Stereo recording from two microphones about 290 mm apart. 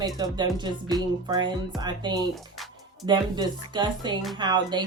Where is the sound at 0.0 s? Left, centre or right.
Centre.